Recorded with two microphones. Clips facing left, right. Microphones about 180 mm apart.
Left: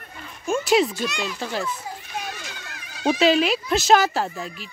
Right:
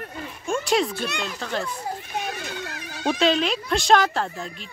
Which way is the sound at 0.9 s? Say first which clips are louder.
Left 1 dB; 60° right (ahead or behind).